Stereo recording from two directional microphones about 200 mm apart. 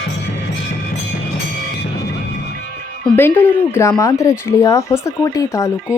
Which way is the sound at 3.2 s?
10° left (ahead or behind).